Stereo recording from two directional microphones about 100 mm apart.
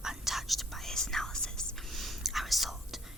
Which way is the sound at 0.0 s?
5° right (ahead or behind).